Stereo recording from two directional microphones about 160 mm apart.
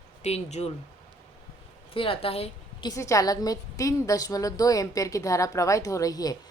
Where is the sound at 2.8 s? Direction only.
20° left (ahead or behind).